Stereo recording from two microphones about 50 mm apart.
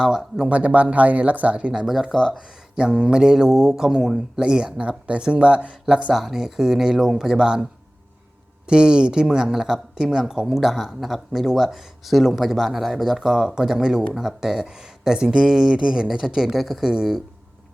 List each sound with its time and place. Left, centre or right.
0.0 s speech: centre
0.5 s speech: right
1.7 s speech: centre
6.1 s speech: centre
8.6 s speech: centre